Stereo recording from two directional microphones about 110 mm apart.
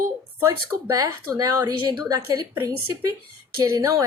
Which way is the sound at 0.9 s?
30° right (ahead or behind).